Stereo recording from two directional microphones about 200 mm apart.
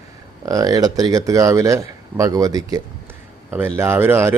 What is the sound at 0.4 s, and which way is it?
Speech, 15° right (ahead or behind).